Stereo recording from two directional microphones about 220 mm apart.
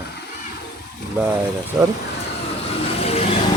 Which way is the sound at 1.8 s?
10° right (ahead or behind).